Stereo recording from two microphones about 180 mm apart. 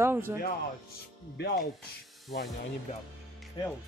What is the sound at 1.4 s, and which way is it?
Speech, 65° left (ahead or behind).